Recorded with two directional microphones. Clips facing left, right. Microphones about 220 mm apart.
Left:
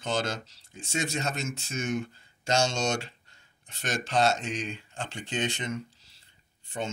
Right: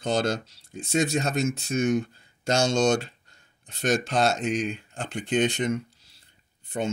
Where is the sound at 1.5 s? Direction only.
55° right (ahead or behind).